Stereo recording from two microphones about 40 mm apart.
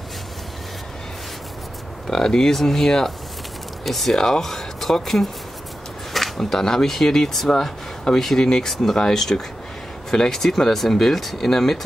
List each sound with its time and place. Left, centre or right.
2.0 s speech: centre